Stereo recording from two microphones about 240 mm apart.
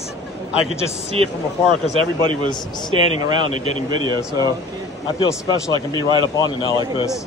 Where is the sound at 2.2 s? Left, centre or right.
Right.